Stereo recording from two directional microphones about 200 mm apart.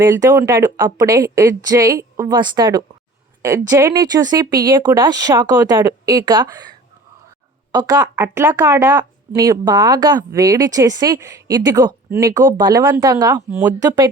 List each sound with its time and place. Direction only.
0.0 s speech: 15° right (ahead or behind)